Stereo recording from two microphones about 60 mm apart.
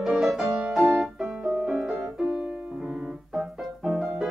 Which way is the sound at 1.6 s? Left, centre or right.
Centre.